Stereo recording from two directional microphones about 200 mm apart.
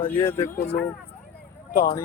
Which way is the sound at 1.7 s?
45° left (ahead or behind).